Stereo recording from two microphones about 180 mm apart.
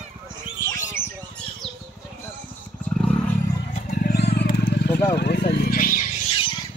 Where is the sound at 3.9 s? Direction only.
60° left (ahead or behind).